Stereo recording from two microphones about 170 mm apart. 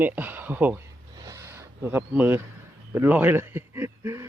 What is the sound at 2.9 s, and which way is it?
A man's voice, 10° right (ahead or behind).